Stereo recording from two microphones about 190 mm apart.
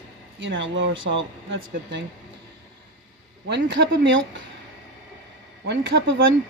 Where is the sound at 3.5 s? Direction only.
70° right (ahead or behind).